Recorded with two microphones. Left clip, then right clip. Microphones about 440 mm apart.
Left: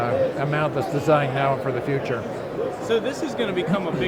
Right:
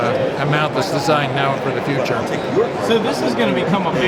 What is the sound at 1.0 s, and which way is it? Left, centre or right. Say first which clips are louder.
Speech: right 1 dB; left.